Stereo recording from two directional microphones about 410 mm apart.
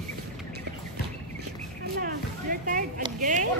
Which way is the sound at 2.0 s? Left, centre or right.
Centre.